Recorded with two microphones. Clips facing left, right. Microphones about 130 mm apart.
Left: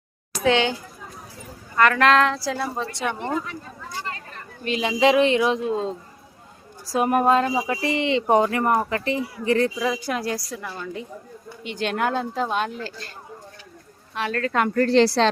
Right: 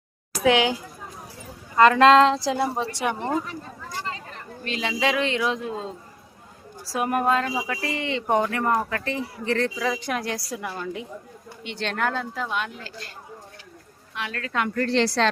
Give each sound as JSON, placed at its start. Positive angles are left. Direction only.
{"t": 0.4, "sound": "speech", "side_deg": -10}
{"t": 1.7, "sound": "speech", "side_deg": -20}
{"t": 3.3, "sound": "speech", "side_deg": -35}
{"t": 4.6, "sound": "speech", "side_deg": 15}
{"t": 6.9, "sound": "a woman's voice", "side_deg": 20}
{"t": 11.6, "sound": "speech", "side_deg": 5}
{"t": 14.1, "sound": "a woman's voice", "side_deg": 40}